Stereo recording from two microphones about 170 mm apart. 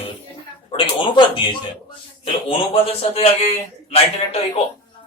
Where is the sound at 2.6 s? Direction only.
35° left (ahead or behind).